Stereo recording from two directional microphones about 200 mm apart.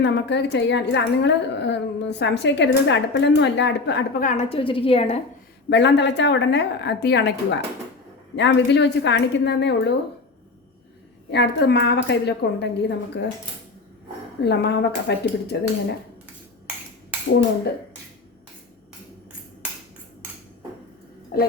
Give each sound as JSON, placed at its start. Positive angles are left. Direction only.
{"t": 0.0, "sound": "a woman's voice", "side_deg": 60}
{"t": 4.2, "sound": "a woman's voice", "side_deg": 35}
{"t": 5.6, "sound": "a woman's voice", "side_deg": 60}
{"t": 11.3, "sound": "a woman's voice", "side_deg": 60}
{"t": 14.4, "sound": "a woman's voice", "side_deg": 55}
{"t": 21.3, "sound": "a sound", "side_deg": 50}